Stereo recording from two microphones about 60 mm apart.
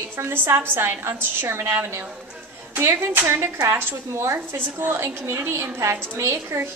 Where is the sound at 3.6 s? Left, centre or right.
Right.